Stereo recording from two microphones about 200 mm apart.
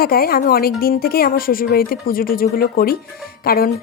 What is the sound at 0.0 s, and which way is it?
Speech, 50° left (ahead or behind).